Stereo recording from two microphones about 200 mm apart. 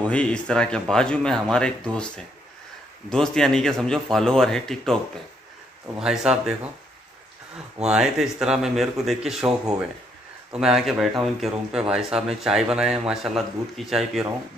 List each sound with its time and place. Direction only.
0.0 s speech: 5° left (ahead or behind)
5.9 s speech: 5° right (ahead or behind)
7.8 s speech: 5° right (ahead or behind)
10.5 s speech: 5° right (ahead or behind)